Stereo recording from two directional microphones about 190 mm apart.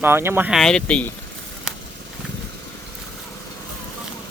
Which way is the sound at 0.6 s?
5° left (ahead or behind).